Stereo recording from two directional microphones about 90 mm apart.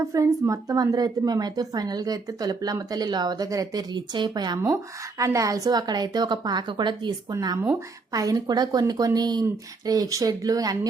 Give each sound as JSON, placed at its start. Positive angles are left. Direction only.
{"t": 0.0, "sound": "a woman's voice", "side_deg": -35}
{"t": 7.3, "sound": "a woman's voice", "side_deg": -40}